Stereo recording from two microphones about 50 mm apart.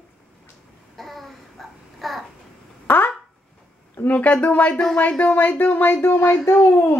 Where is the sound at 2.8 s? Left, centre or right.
Left.